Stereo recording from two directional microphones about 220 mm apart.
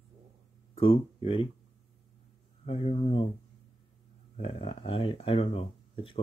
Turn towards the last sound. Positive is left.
turn(degrees=25)  # may be behind; listen again after turning